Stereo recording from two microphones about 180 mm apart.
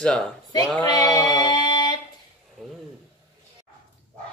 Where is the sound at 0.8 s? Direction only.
20° left (ahead or behind).